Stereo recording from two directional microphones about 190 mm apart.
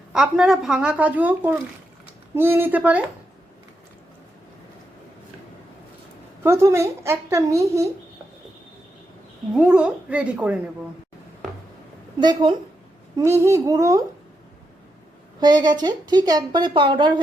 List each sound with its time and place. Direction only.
0.1 s a woman's voice: 5° right (ahead or behind)
6.4 s a woman's voice: 15° right (ahead or behind)
9.6 s speech: 5° right (ahead or behind)
12.2 s a woman's voice: 25° right (ahead or behind)
15.4 s a woman's voice: 20° right (ahead or behind)